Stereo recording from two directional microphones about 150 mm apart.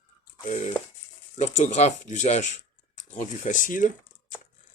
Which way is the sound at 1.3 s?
50° left (ahead or behind).